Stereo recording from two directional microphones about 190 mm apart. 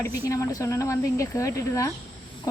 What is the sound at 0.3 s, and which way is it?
Speech, 15° left (ahead or behind).